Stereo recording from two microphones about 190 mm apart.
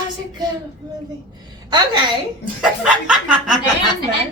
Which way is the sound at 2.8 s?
5° right (ahead or behind).